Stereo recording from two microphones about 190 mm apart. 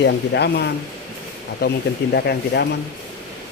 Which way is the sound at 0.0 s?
60° left (ahead or behind).